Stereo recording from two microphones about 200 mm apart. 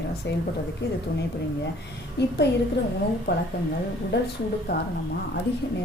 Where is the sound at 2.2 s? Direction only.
55° left (ahead or behind).